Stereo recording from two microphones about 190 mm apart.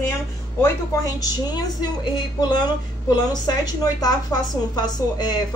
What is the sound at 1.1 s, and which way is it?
A woman's voice, 20° left (ahead or behind).